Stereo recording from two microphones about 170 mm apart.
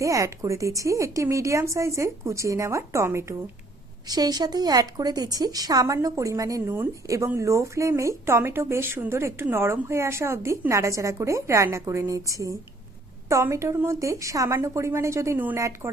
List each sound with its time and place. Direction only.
0.0 s speech: 20° right (ahead or behind)